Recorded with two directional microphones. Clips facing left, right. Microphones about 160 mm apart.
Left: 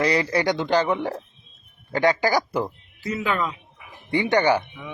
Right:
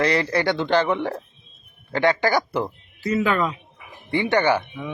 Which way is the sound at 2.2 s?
10° left (ahead or behind).